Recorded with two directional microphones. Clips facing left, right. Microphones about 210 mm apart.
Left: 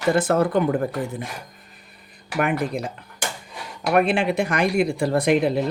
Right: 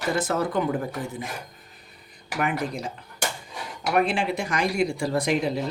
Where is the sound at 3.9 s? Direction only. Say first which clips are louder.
Left 4 dB; 60° left (ahead or behind).